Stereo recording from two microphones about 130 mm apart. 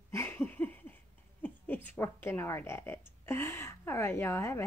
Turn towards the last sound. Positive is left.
turn(degrees=20)  # may be behind; listen again after turning